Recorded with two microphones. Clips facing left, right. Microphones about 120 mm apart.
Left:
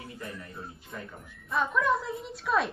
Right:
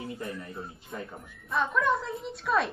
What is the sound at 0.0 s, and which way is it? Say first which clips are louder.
Music: right 5 dB; 25° right (ahead or behind).